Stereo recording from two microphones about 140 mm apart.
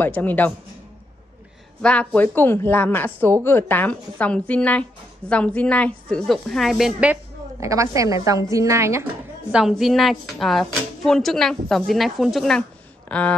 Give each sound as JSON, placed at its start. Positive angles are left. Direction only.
{"t": 0.0, "sound": "a woman's voice", "side_deg": 15}
{"t": 1.8, "sound": "a woman's voice", "side_deg": 10}
{"t": 7.6, "sound": "a woman's voice", "side_deg": -20}
{"t": 9.5, "sound": "a woman's voice", "side_deg": -5}